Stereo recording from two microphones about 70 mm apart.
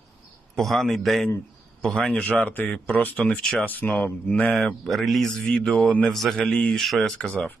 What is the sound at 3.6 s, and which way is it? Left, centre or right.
Speech, left.